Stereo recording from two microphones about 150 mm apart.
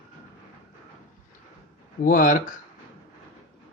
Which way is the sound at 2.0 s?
65° left (ahead or behind).